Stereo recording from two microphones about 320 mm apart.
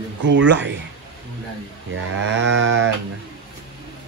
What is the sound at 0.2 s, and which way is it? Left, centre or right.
Speech, right.